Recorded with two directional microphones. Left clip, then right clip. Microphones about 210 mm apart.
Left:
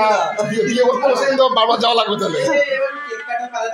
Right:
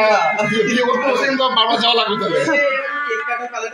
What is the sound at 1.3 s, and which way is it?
Speech, 20° left (ahead or behind).